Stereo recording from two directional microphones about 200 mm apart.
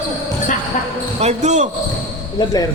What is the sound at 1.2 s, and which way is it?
Speech, 35° right (ahead or behind).